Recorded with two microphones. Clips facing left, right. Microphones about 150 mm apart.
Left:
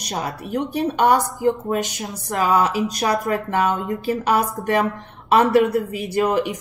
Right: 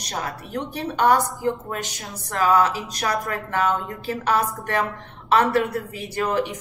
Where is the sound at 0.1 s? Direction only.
15° left (ahead or behind).